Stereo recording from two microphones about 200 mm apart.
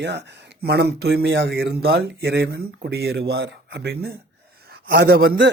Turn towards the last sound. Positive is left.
turn(degrees=-50)  # may be behind; listen again after turning